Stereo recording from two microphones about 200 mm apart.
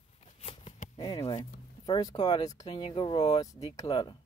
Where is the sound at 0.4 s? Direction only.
30° left (ahead or behind).